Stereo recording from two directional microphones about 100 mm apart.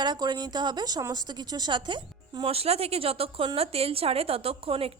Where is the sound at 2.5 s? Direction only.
85° right.